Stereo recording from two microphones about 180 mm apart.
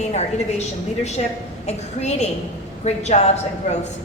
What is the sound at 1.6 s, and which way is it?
A woman's voice, 35° left (ahead or behind).